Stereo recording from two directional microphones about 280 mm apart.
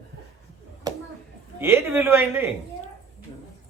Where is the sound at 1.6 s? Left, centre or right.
Centre.